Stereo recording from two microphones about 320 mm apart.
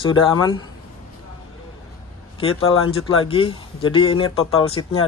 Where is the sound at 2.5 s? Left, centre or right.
Left.